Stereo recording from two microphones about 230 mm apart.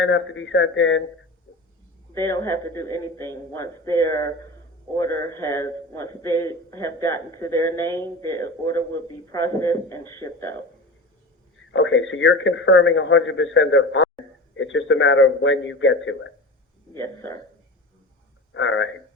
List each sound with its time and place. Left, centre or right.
0.0 s speech: left
2.1 s a man's voice: centre
11.7 s speech: left
16.9 s a man's voice: centre
18.5 s speech: left